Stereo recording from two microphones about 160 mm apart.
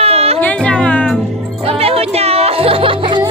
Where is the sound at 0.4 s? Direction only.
10° left (ahead or behind).